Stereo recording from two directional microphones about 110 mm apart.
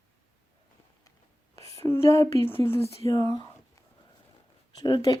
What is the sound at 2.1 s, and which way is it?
Speech, 25° left (ahead or behind).